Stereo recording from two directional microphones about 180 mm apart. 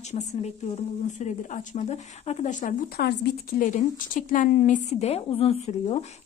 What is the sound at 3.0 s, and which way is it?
Speech, 55° left (ahead or behind).